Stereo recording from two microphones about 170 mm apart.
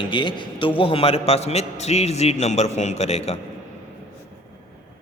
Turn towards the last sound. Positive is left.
turn(degrees=40)  # may be behind; listen again after turning